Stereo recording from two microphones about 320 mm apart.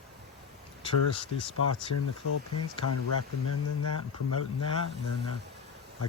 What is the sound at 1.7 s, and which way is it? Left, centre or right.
Speech, left.